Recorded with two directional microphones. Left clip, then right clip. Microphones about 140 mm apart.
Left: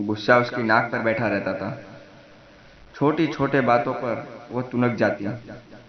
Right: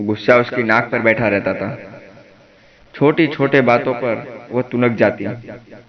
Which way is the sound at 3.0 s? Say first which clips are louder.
Right 7 dB; 15° right (ahead or behind).